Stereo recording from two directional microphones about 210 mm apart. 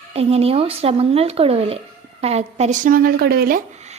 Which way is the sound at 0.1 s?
30° right (ahead or behind).